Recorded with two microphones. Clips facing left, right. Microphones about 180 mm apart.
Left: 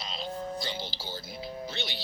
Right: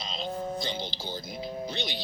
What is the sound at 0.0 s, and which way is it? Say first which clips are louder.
Speech: right 2 dB; 20° right (ahead or behind).